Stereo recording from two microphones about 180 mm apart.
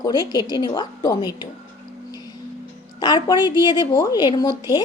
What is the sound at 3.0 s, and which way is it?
A woman's voice, 25° left (ahead or behind).